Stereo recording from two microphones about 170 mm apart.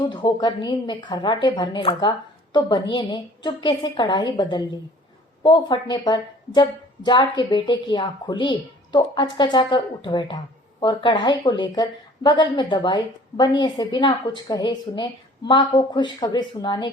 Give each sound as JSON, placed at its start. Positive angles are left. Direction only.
{"t": 0.1, "sound": "a woman's voice", "side_deg": 25}